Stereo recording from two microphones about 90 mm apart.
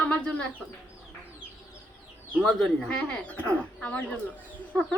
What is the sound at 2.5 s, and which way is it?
A woman's voice, 5° left (ahead or behind).